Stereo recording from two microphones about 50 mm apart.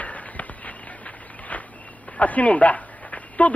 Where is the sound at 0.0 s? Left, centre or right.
Left.